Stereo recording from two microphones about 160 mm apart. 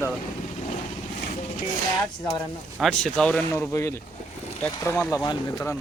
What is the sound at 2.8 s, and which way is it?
Speech, 5° left (ahead or behind).